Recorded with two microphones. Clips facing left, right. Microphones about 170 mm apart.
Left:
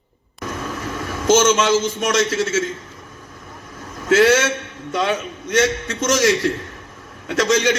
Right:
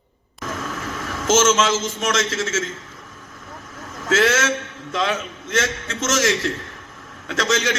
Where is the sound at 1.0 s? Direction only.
10° left (ahead or behind).